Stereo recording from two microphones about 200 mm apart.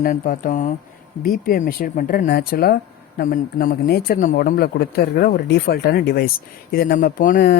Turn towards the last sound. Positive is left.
turn(degrees=45)  # may be behind; listen again after turning